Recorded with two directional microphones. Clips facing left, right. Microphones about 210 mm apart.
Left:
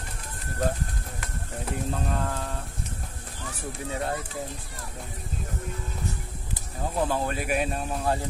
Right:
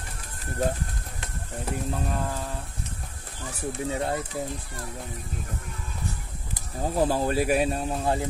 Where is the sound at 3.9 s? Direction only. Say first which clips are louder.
Right 1 dB; 25° right (ahead or behind).